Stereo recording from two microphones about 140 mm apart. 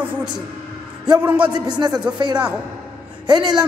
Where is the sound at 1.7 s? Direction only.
30° right (ahead or behind).